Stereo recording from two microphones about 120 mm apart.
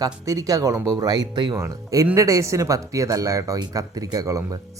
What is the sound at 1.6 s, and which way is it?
Speech, 25° right (ahead or behind).